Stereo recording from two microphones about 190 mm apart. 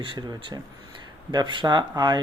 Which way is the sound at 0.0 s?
25° right (ahead or behind).